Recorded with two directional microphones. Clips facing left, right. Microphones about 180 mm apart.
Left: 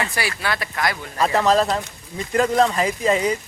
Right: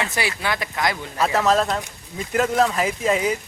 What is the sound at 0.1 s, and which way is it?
Speech, 20° right (ahead or behind).